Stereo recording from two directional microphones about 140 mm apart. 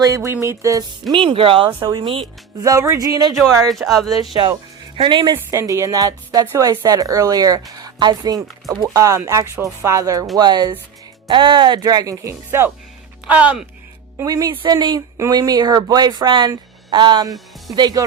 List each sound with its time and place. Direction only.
0.0 s speech: 20° right (ahead or behind)
1.1 s speech: 35° right (ahead or behind)
2.6 s speech: 25° right (ahead or behind)
3.7 s speech: centre (ahead or behind)
4.9 s speech: 35° right (ahead or behind)
5.5 s a woman's voice: 20° right (ahead or behind)
14.2 s speech: 25° right (ahead or behind)